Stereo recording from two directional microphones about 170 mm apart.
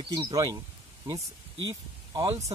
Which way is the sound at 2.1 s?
30° right (ahead or behind).